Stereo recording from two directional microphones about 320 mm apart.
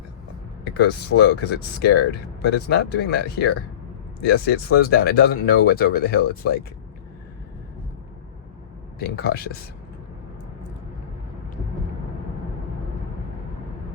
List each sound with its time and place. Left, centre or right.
0.6 s speech: left
9.0 s speech: left